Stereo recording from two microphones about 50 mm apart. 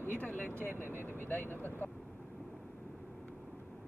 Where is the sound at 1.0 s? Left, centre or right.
Left.